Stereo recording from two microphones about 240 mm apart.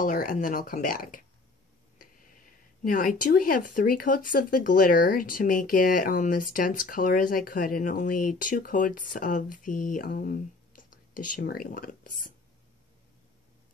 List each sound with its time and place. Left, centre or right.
0.0 s speech: left
2.0 s a sound: left
3.7 s speech: left